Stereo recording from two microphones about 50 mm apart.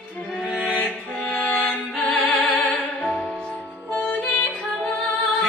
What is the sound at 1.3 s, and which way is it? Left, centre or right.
Music, left.